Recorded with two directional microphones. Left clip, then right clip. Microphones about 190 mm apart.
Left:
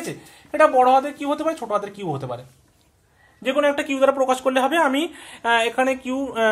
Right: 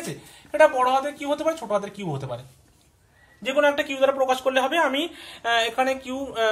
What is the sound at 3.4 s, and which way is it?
Speech, 40° left (ahead or behind).